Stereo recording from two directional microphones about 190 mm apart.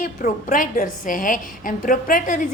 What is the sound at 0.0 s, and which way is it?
A woman's voice, 45° left (ahead or behind).